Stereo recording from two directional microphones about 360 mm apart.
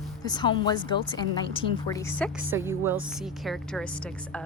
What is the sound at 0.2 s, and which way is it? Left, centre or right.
A woman's voice, centre.